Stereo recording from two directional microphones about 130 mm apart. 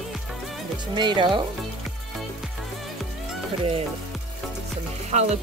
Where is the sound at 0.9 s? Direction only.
35° right (ahead or behind).